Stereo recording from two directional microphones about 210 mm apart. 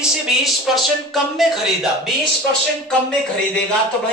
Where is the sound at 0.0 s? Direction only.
Centre (ahead or behind).